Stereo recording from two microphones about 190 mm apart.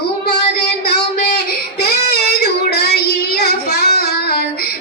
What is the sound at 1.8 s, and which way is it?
Child singing, 60° left (ahead or behind).